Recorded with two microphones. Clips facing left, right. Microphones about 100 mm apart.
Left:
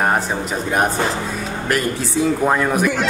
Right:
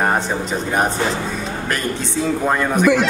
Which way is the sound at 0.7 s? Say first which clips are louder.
Left 1 dB; centre (ahead or behind).